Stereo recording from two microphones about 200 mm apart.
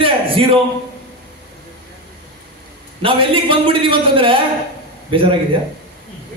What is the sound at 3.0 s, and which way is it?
A man's voice, 25° right (ahead or behind).